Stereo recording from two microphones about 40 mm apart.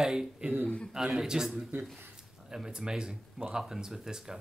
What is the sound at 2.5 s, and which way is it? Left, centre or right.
Speech, centre.